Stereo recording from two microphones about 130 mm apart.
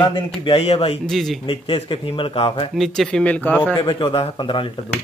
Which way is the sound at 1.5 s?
40° left (ahead or behind).